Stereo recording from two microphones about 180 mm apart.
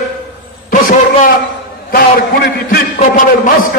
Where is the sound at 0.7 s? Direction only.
50° left (ahead or behind).